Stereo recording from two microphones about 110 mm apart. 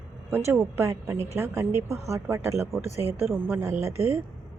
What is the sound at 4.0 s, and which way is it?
Speech, 70° left (ahead or behind).